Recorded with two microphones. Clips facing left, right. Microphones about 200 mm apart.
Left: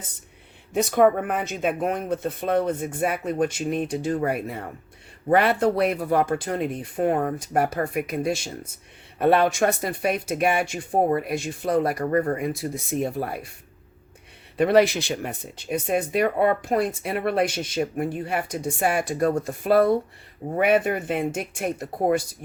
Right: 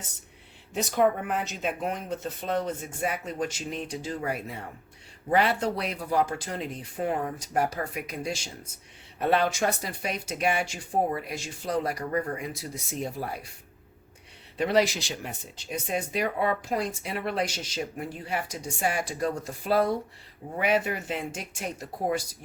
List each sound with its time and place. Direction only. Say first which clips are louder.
0.7 s speech: left 6 dB; 55° left (ahead or behind)
14.6 s speech: left 6 dB; 55° left (ahead or behind)